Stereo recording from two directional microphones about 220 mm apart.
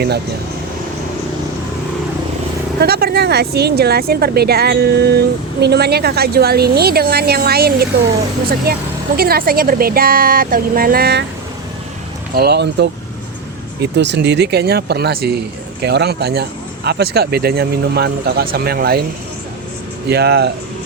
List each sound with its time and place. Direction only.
2.8 s speech: 45° right (ahead or behind)
9.1 s speech: 45° right (ahead or behind)
12.3 s speech: 45° right (ahead or behind)
20.1 s speech: 50° right (ahead or behind)